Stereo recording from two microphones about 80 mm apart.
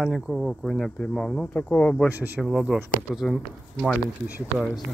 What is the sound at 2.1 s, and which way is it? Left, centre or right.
Speech, right.